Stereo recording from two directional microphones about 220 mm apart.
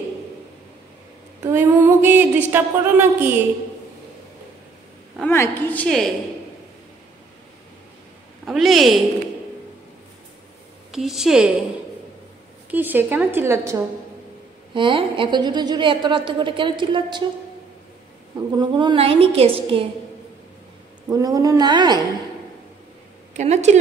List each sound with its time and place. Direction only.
1.4 s a sound: 10° right (ahead or behind)
5.3 s a woman's voice: 10° left (ahead or behind)
8.5 s a woman's voice: centre (ahead or behind)
10.9 s a woman's voice: centre (ahead or behind)
12.7 s a sound: 10° right (ahead or behind)
14.7 s a woman's voice: 25° right (ahead or behind)
18.6 s a woman's voice: 20° right (ahead or behind)
21.1 s a sound: 15° right (ahead or behind)
23.3 s speech: 30° right (ahead or behind)